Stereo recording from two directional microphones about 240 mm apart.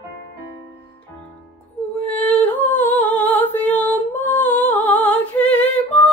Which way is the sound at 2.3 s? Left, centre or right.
Centre.